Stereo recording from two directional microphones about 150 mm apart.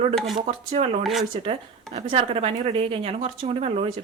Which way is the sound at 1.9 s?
40° right (ahead or behind).